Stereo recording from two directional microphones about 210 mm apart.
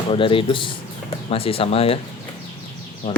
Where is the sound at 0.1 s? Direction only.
25° left (ahead or behind).